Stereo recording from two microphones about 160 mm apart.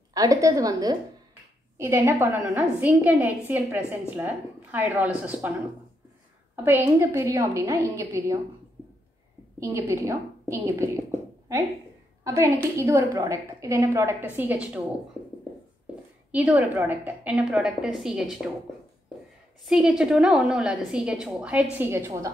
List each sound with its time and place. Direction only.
0.1 s a woman's voice: 20° right (ahead or behind)
6.5 s a woman's voice: 15° right (ahead or behind)
9.6 s a woman's voice: 15° right (ahead or behind)
12.7 s a woman's voice: 15° right (ahead or behind)
16.4 s a woman's voice: 10° right (ahead or behind)
19.6 s a woman's voice: 5° right (ahead or behind)